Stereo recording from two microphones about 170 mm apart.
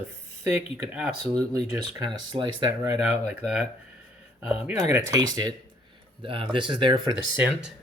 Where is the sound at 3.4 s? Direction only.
5° right (ahead or behind).